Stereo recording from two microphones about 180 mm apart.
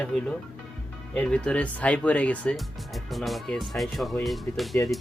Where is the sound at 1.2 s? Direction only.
5° left (ahead or behind).